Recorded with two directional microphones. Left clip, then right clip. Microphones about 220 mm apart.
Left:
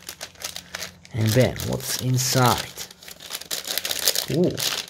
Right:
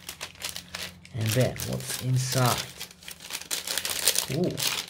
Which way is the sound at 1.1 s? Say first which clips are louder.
Left 6 dB; 50° left (ahead or behind).